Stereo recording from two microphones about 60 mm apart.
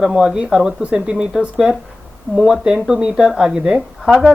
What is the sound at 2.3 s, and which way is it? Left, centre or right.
Speech, centre.